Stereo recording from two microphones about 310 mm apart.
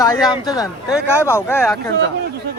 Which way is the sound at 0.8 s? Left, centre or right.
Centre.